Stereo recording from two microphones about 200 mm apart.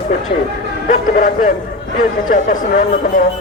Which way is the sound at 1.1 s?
40° left (ahead or behind).